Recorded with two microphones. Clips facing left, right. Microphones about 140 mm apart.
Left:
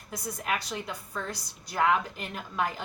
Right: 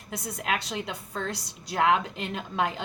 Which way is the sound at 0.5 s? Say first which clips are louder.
Right 2 dB; 25° right (ahead or behind).